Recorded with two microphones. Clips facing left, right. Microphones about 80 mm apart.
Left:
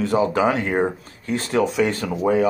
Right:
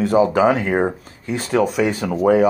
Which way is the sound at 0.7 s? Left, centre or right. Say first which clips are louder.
Right 2 dB; centre.